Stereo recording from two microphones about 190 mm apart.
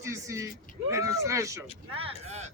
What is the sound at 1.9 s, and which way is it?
Speech, 30° right (ahead or behind).